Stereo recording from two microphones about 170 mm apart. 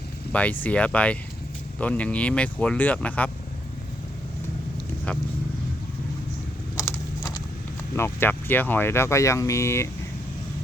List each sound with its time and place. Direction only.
0.3 s speech: 10° left (ahead or behind)
6.7 s a sound: 15° left (ahead or behind)
7.9 s speech: 15° left (ahead or behind)